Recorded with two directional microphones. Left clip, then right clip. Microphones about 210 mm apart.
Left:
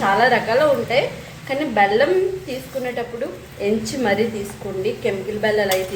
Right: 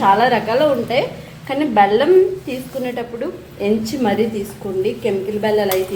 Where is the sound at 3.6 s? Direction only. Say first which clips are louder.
Right 2 dB; 25° right (ahead or behind).